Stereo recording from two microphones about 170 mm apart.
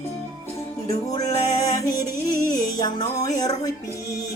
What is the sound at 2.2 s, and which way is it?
Music, 20° left (ahead or behind).